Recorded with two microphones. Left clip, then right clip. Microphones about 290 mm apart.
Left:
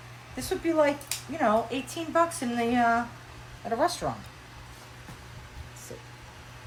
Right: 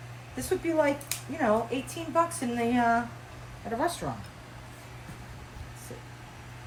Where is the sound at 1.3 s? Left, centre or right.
Centre.